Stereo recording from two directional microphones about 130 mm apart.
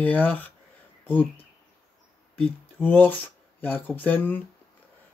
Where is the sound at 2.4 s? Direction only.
15° left (ahead or behind).